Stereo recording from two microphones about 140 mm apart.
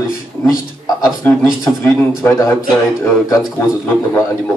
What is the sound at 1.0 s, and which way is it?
A man's voice, 20° left (ahead or behind).